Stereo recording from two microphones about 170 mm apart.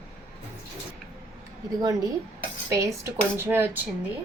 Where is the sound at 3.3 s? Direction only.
10° right (ahead or behind).